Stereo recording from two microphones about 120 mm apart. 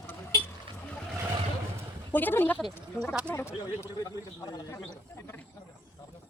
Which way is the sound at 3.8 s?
30° left (ahead or behind).